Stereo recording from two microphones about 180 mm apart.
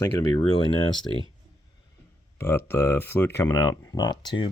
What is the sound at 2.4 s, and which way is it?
Speech, 15° left (ahead or behind).